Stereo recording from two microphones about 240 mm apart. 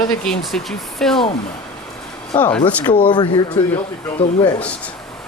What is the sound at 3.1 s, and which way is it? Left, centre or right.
Speech, centre.